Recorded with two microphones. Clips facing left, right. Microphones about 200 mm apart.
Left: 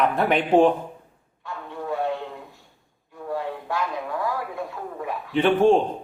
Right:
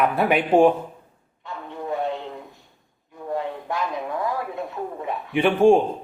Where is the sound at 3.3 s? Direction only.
20° right (ahead or behind).